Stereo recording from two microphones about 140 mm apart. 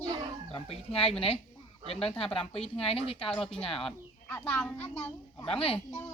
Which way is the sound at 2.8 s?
40° left (ahead or behind).